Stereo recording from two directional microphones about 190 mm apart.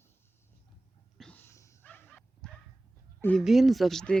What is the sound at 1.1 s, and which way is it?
Dog, 5° left (ahead or behind).